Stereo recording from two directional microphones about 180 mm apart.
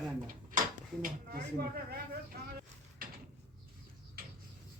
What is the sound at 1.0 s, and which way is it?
Speech, 55° right (ahead or behind).